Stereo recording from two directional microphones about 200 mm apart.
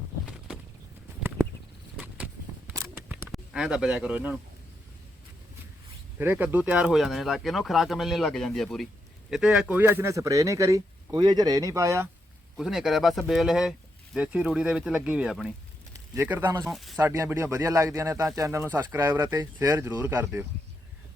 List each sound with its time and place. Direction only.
2.0 s a sound: 5° right (ahead or behind)
6.1 s speech: 10° right (ahead or behind)
12.5 s speech: centre (ahead or behind)
16.6 s speech: centre (ahead or behind)
17.1 s speech: 15° right (ahead or behind)